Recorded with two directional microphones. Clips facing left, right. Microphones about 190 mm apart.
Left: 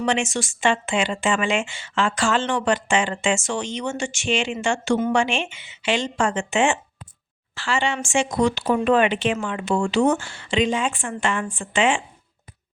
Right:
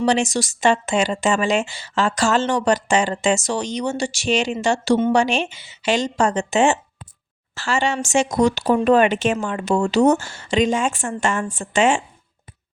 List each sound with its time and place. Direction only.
0.0 s speech: 35° right (ahead or behind)